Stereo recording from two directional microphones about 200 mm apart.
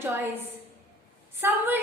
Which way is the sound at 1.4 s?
10° right (ahead or behind).